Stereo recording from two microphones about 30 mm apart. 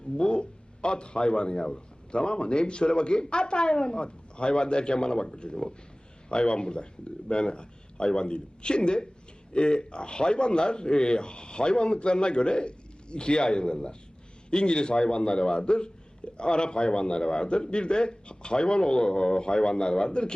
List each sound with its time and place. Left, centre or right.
0.2 s a man's voice: left